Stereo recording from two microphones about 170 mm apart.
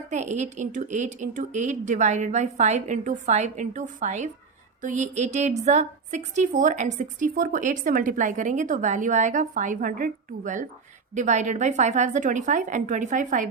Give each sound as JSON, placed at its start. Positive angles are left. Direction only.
{"t": 0.1, "sound": "a woman's voice", "side_deg": -45}